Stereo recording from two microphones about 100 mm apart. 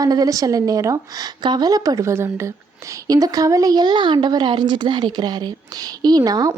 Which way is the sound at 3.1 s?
40° right (ahead or behind).